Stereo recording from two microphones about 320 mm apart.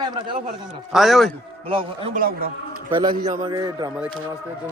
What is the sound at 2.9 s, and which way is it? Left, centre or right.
A man's voice, centre.